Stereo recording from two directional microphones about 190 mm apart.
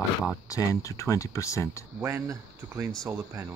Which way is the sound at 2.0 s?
15° right (ahead or behind).